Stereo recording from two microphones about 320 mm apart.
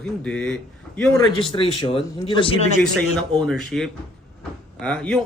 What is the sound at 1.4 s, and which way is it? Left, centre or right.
Speech, centre.